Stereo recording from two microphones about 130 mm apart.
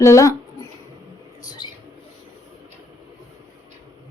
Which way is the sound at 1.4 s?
35° left (ahead or behind).